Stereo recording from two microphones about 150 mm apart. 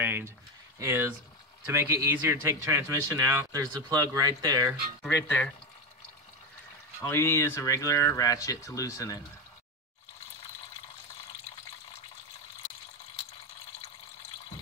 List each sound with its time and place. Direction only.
0.0 s a sound: 15° right (ahead or behind)
0.7 s a man's voice: 15° right (ahead or behind)
5.1 s speech: 15° left (ahead or behind)
7.0 s speech: 15° left (ahead or behind)